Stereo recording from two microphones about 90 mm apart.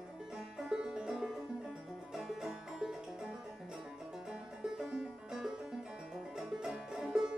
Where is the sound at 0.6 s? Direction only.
10° right (ahead or behind).